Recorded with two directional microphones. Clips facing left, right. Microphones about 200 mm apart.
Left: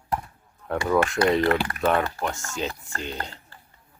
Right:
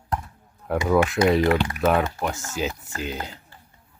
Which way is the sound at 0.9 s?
5° right (ahead or behind).